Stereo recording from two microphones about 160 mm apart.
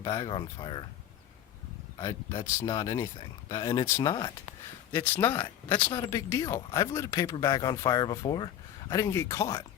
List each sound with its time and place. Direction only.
0.0 s speech: 30° left (ahead or behind)
2.0 s speech: 25° left (ahead or behind)
4.9 s speech: 10° left (ahead or behind)
6.1 s speech: 20° left (ahead or behind)